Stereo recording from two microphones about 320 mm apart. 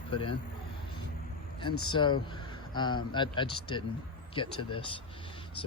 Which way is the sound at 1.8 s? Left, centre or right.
Centre.